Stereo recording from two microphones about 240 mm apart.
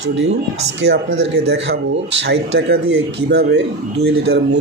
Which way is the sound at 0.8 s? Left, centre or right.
Right.